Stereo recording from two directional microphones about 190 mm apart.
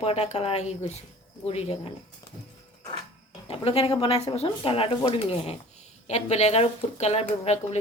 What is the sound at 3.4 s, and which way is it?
A woman's voice, 30° left (ahead or behind).